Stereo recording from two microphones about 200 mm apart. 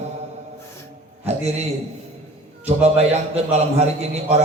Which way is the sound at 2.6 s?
30° right (ahead or behind).